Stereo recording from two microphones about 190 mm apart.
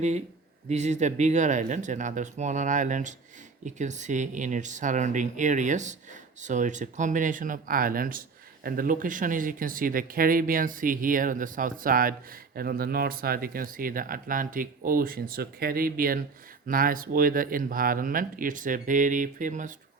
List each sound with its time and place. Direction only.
0.7 s speech: 35° right (ahead or behind)